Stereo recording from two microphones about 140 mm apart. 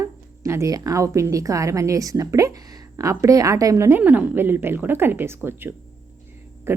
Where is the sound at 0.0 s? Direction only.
20° right (ahead or behind).